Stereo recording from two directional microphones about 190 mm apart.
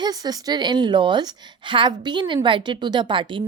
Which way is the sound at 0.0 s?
20° right (ahead or behind).